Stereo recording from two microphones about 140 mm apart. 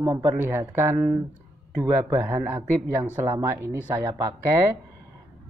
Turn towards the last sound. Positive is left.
turn(degrees=-20)  # may be behind; listen again after turning